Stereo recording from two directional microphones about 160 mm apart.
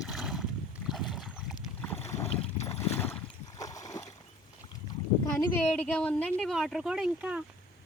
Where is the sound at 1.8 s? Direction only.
10° left (ahead or behind).